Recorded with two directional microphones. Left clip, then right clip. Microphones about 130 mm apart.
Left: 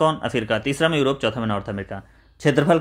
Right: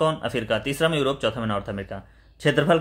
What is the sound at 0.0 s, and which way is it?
Speech, 25° left (ahead or behind).